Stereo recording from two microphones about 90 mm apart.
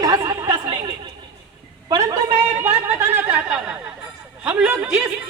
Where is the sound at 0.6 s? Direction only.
65° right (ahead or behind).